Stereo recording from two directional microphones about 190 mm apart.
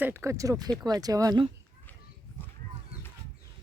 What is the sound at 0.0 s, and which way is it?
Speech, 15° right (ahead or behind).